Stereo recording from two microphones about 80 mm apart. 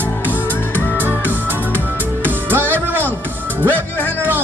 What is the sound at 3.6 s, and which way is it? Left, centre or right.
Music, left.